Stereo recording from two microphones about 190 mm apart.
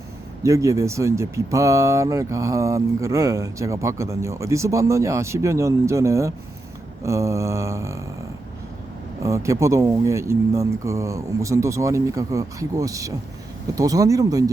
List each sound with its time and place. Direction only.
0.4 s speech: 15° right (ahead or behind)
9.2 s speech: 15° right (ahead or behind)